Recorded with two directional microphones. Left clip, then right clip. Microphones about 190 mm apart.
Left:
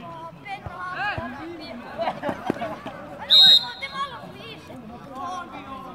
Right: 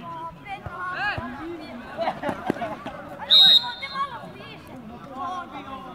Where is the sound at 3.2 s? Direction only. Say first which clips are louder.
Left 1 dB; 45° left (ahead or behind).